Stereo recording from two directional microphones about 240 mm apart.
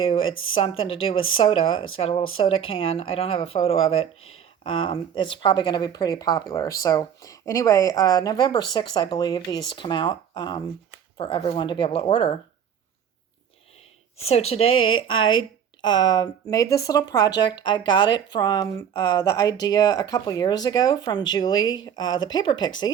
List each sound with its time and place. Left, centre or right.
0.0 s speech: left
0.3 s speech: left
0.5 s speech: left
14.2 s speech: left